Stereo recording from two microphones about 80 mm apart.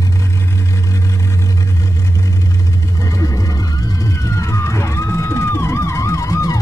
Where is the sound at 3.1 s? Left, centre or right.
Left.